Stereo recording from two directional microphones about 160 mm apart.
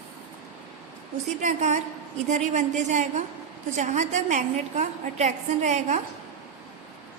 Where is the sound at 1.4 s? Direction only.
50° right (ahead or behind).